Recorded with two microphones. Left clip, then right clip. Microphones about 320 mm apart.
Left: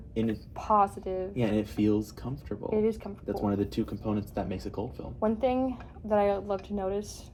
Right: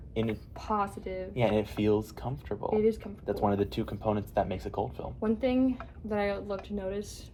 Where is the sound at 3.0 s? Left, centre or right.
Left.